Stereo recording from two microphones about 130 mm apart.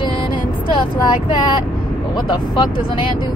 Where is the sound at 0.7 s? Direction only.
35° left (ahead or behind).